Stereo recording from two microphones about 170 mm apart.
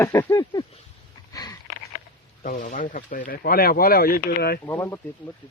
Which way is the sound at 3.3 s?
65° left (ahead or behind).